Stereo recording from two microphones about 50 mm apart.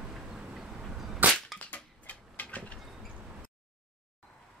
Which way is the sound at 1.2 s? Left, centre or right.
Right.